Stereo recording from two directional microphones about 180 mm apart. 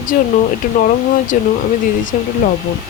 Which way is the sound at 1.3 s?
45° left (ahead or behind).